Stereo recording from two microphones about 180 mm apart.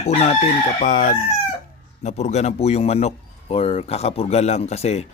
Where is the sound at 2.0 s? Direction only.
40° left (ahead or behind).